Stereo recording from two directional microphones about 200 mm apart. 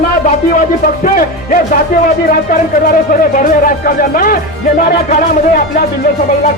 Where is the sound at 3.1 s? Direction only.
45° left (ahead or behind).